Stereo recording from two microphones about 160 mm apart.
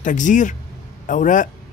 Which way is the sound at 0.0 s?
50° left (ahead or behind).